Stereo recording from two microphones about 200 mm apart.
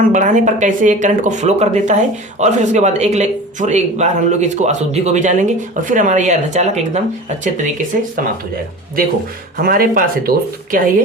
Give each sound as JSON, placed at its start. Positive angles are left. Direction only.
{"t": 0.1, "sound": "speech", "side_deg": -40}
{"t": 9.6, "sound": "speech", "side_deg": -45}